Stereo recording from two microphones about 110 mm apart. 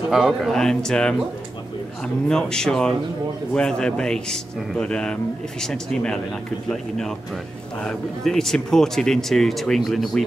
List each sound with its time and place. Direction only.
0.1 s speech: centre (ahead or behind)
2.2 s a man's voice: 5° left (ahead or behind)